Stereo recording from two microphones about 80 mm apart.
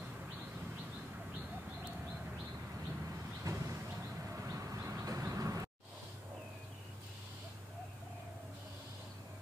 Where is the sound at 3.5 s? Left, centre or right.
Right.